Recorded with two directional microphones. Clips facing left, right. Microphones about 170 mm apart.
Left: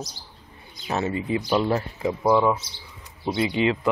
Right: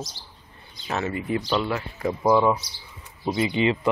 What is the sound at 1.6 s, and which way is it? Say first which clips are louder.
Speech: left 4 dB; 35° left (ahead or behind).